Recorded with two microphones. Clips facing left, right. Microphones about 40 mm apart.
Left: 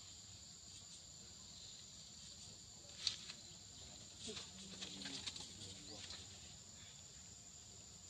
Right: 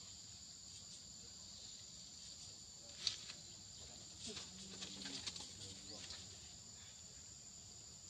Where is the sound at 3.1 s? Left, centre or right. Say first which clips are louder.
Even; centre.